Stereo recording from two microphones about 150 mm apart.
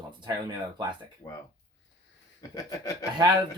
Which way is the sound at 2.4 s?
20° left (ahead or behind).